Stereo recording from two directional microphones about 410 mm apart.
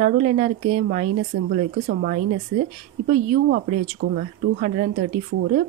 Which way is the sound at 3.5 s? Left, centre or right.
Right.